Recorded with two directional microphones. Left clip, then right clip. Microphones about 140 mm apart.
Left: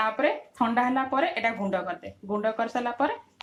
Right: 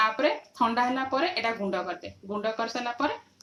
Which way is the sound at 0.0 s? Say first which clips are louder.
Right 1 dB; 40° left (ahead or behind).